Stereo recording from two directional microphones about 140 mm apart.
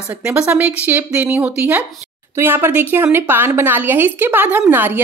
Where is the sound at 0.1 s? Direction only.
15° right (ahead or behind).